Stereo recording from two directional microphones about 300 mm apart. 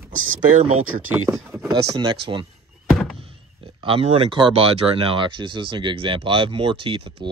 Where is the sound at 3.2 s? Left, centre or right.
Centre.